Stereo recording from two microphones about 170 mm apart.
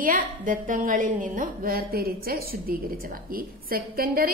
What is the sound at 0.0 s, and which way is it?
A woman's voice, 50° right (ahead or behind).